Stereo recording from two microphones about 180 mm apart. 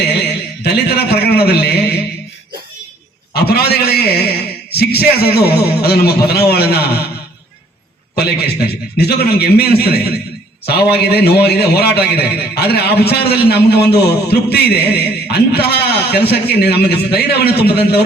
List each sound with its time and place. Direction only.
0.0 s a sound: 65° left (ahead or behind)
3.3 s a man's voice: 60° left (ahead or behind)
8.1 s a man's voice: 65° left (ahead or behind)